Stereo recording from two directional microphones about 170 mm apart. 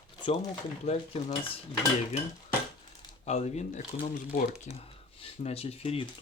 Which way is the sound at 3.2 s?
40° left (ahead or behind).